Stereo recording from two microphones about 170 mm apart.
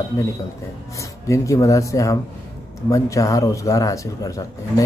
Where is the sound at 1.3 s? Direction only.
20° left (ahead or behind).